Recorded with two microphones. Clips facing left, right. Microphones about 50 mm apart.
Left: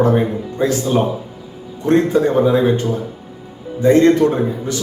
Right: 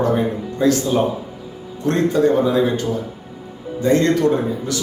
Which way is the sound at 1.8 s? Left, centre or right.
Left.